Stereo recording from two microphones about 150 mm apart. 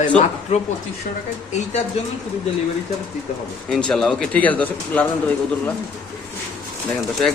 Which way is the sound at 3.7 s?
5° left (ahead or behind).